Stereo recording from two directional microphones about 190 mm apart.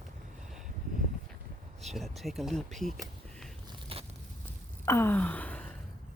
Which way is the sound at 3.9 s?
30° right (ahead or behind).